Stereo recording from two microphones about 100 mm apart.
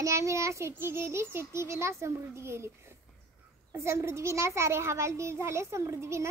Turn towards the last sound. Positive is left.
turn(degrees=-30)  # may be behind; listen again after turning